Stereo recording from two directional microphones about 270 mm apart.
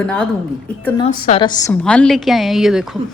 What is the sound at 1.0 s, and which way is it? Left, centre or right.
Speech, left.